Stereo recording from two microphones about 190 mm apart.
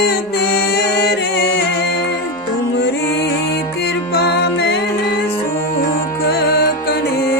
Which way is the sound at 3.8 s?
60° left (ahead or behind).